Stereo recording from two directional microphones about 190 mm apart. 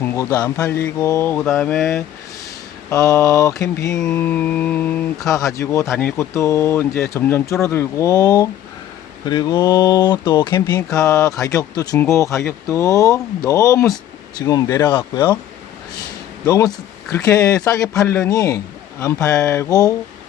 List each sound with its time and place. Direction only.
0.0 s speech: 15° left (ahead or behind)
2.9 s speech: 15° left (ahead or behind)
3.9 s mantra: 5° left (ahead or behind)
5.5 s speech: 15° left (ahead or behind)
16.5 s speech: 15° left (ahead or behind)